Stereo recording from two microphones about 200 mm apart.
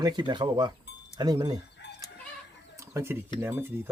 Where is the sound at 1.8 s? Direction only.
60° left (ahead or behind).